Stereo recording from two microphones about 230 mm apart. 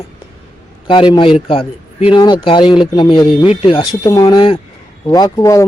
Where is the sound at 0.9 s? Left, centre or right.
Left.